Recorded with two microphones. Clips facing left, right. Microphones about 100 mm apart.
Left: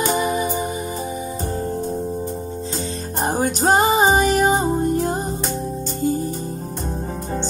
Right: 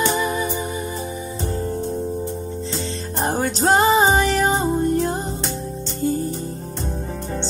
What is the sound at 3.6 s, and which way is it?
Music, 35° left (ahead or behind).